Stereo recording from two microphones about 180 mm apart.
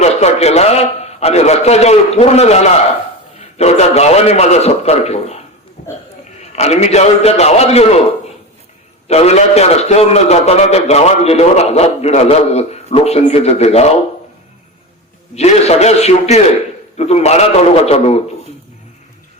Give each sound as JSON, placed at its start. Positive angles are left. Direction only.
{"t": 0.0, "sound": "a man's voice", "side_deg": 40}
{"t": 9.0, "sound": "a man's voice", "side_deg": 35}
{"t": 15.4, "sound": "a man's voice", "side_deg": 35}